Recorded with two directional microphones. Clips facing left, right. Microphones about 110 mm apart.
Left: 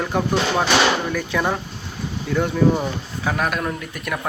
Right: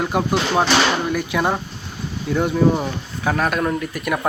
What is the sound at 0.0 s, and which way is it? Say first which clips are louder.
A man's voice: right 1 dB; 15° right (ahead or behind).